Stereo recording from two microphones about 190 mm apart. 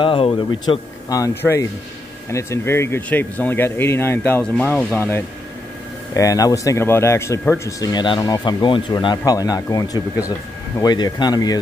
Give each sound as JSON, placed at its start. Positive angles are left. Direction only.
{"t": 0.0, "sound": "speech", "side_deg": 25}